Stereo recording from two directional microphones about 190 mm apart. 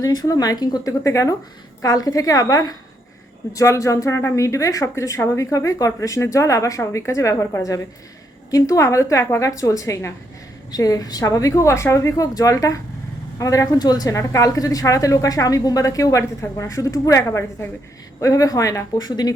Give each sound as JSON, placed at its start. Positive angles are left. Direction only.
{"t": 0.0, "sound": "speech", "side_deg": 20}